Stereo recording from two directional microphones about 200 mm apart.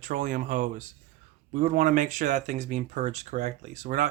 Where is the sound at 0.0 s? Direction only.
40° right (ahead or behind).